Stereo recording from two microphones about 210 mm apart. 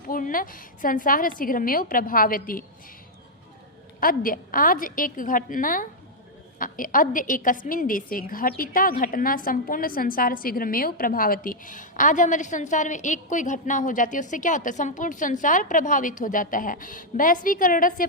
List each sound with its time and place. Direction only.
0.1 s a woman's voice: 40° left (ahead or behind)
4.0 s a woman's voice: 40° left (ahead or behind)